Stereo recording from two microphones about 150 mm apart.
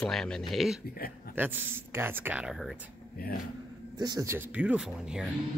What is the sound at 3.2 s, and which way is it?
Speech, 90° left.